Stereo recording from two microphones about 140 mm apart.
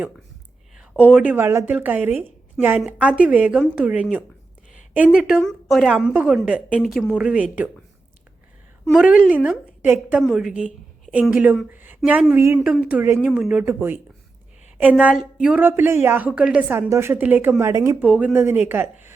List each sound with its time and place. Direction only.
1.1 s a woman's voice: 10° right (ahead or behind)
5.4 s a woman's voice: centre (ahead or behind)
8.9 s a woman's voice: 5° right (ahead or behind)